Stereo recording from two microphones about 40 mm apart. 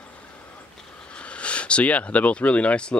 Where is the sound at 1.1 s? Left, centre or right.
Left.